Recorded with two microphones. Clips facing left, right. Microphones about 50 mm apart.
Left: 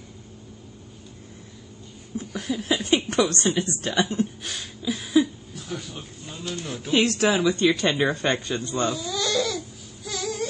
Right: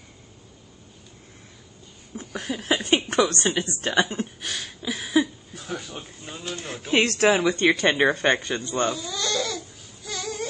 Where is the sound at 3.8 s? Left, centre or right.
Right.